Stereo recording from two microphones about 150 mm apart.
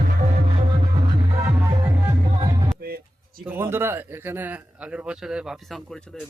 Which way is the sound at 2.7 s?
90° right.